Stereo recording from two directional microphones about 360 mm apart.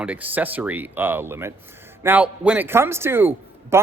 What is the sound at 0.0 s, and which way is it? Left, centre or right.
A man's voice, centre.